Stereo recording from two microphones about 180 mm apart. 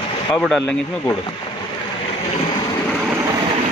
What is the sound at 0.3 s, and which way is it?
Speech, 5° left (ahead or behind).